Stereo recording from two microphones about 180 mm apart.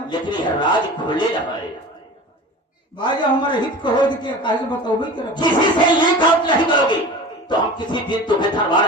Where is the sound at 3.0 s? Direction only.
25° left (ahead or behind).